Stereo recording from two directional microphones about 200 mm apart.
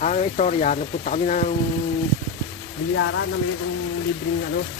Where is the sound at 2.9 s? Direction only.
70° left (ahead or behind).